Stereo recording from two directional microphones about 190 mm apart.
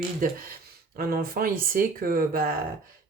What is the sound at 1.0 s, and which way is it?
Speech, 50° right (ahead or behind).